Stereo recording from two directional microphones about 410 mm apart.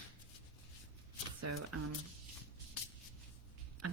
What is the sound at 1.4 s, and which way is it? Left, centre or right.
Speech, right.